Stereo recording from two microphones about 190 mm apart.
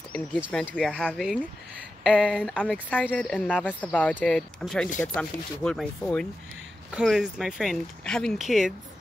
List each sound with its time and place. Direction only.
0.7 s speech: centre (ahead or behind)